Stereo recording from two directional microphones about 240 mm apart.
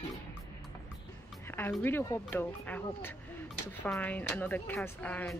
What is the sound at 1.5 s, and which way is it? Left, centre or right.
Speech, centre.